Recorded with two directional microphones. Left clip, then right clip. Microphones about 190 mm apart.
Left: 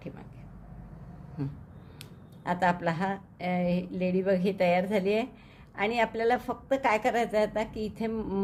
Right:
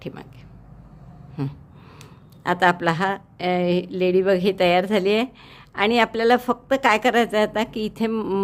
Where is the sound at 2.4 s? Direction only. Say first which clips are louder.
Right 8 dB; 35° right (ahead or behind).